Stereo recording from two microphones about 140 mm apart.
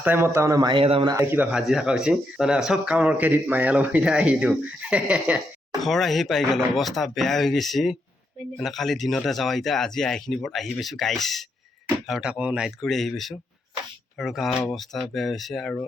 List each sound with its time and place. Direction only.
0.0 s a man's voice: 15° right (ahead or behind)
0.7 s speech: 40° right (ahead or behind)
1.1 s speech: 15° right (ahead or behind)
1.5 s speech: 5° right (ahead or behind)